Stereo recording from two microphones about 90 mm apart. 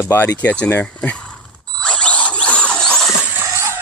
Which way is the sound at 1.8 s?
15° left (ahead or behind).